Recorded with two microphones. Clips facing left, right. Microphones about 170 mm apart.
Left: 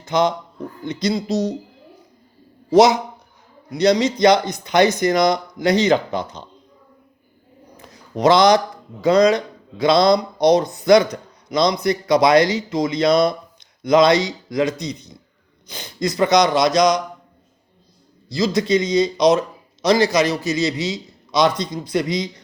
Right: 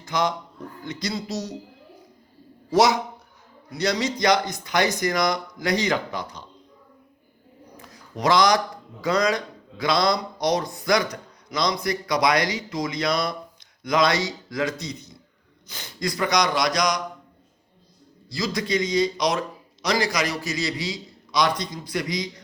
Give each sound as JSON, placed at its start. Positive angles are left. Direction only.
{"t": 0.0, "sound": "speech", "side_deg": 25}
{"t": 2.6, "sound": "speech", "side_deg": 20}
{"t": 7.8, "sound": "speech", "side_deg": 25}
{"t": 18.3, "sound": "speech", "side_deg": 25}